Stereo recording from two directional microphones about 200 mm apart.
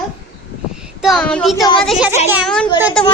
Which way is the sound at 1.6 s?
25° left (ahead or behind).